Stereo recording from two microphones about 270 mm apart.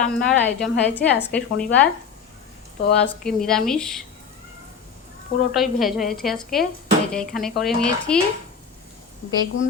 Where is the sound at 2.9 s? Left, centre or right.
Centre.